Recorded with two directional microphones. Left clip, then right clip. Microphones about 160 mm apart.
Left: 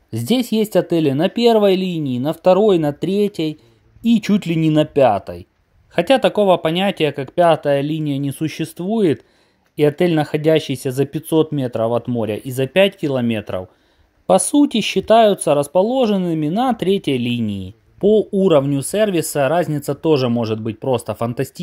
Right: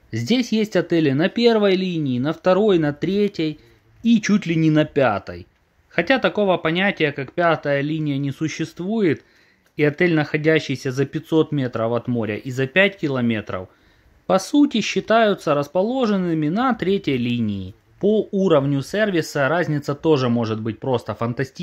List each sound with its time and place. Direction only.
0.1 s speech: 30° left (ahead or behind)
5.9 s speech: 30° left (ahead or behind)